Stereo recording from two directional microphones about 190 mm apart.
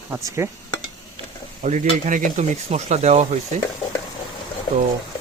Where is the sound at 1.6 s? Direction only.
40° right (ahead or behind).